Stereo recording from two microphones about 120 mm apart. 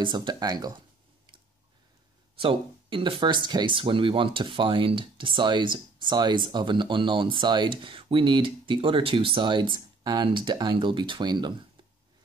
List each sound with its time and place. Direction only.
0.0 s speech: 40° right (ahead or behind)
2.3 s speech: 45° right (ahead or behind)